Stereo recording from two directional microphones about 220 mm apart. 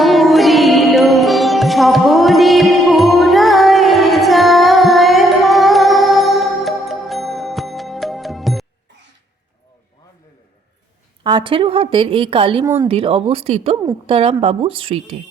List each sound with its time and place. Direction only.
0.0 s music: centre (ahead or behind)
11.2 s a woman's voice: 20° right (ahead or behind)
12.6 s speech: 15° right (ahead or behind)
12.9 s a woman's voice: 25° right (ahead or behind)